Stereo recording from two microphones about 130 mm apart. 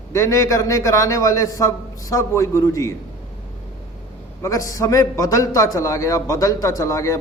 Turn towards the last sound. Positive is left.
turn(degrees=25)  # may be behind; listen again after turning